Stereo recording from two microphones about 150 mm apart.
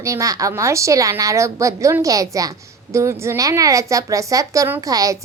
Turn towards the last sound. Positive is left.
turn(degrees=-25)  # may be behind; listen again after turning